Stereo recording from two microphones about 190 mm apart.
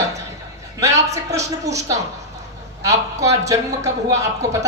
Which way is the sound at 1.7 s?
15° right (ahead or behind).